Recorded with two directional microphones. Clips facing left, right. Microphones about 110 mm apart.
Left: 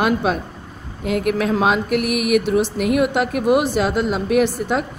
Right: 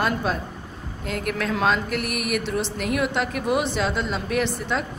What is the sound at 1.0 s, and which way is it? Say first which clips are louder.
A woman's voice: left 8 dB; 55° left (ahead or behind).